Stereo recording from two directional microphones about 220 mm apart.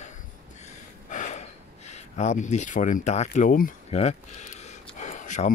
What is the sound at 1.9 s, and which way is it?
Speech, 30° left (ahead or behind).